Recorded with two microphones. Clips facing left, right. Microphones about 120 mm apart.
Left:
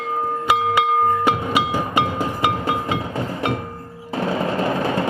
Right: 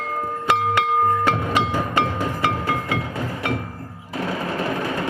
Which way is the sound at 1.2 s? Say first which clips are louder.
Left 1 dB; 10° left (ahead or behind).